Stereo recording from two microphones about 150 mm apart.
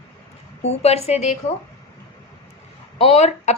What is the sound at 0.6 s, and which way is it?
Speech, 45° left (ahead or behind).